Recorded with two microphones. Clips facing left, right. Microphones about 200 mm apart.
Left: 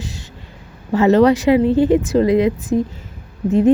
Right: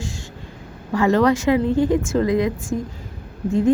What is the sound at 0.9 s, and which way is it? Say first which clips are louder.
A woman's voice: left 5 dB; 20° left (ahead or behind).